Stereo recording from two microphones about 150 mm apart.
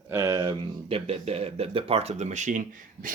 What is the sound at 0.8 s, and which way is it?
Speech, 40° right (ahead or behind).